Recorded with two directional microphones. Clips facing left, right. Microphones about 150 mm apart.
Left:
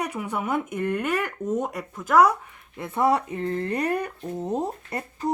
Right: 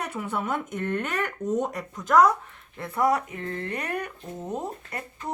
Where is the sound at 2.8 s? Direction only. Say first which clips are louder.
Left 2 dB; 25° left (ahead or behind).